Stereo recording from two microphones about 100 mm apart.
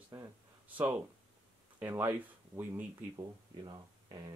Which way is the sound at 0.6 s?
15° right (ahead or behind).